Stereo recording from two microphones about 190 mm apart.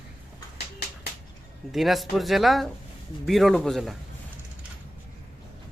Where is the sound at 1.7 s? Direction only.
Centre (ahead or behind).